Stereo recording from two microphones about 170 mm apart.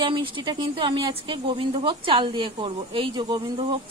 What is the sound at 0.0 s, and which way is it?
A woman's voice, 30° right (ahead or behind).